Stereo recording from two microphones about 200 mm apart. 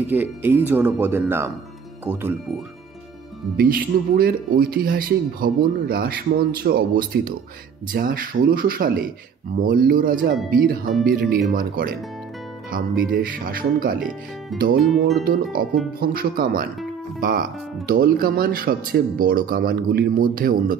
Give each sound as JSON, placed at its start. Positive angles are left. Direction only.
{"t": 0.0, "sound": "speech", "side_deg": -10}
{"t": 2.1, "sound": "speech", "side_deg": 10}
{"t": 3.5, "sound": "speech", "side_deg": -45}
{"t": 13.9, "sound": "speech", "side_deg": 0}
{"t": 15.2, "sound": "speech", "side_deg": -45}